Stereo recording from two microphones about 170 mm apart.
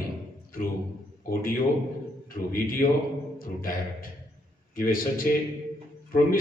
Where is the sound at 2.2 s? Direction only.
55° left (ahead or behind).